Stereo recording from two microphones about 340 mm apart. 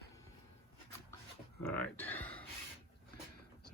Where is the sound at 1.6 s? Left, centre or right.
Centre.